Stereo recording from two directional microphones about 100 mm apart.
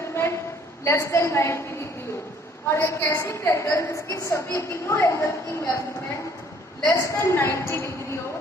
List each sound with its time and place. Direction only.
0.1 s a sound: 25° left (ahead or behind)
0.9 s a woman's voice: 25° left (ahead or behind)
2.6 s a woman's voice: 25° left (ahead or behind)
6.8 s a woman's voice: 30° left (ahead or behind)